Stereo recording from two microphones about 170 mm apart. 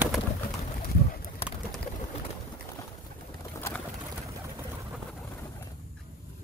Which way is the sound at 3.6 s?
10° left (ahead or behind).